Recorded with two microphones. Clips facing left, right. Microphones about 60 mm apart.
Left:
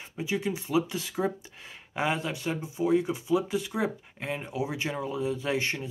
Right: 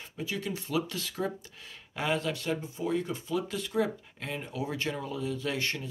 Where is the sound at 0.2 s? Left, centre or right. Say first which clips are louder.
Left 5 dB; centre.